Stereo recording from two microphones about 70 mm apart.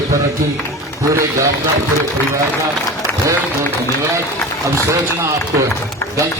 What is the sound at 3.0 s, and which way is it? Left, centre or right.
Applause, right.